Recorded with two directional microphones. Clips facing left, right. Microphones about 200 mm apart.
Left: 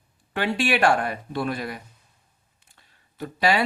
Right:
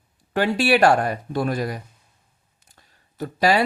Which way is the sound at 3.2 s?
40° right (ahead or behind).